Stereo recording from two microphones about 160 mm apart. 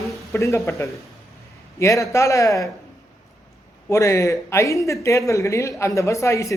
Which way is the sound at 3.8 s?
20° left (ahead or behind).